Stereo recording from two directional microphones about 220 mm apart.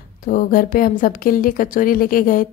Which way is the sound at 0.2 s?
40° left (ahead or behind).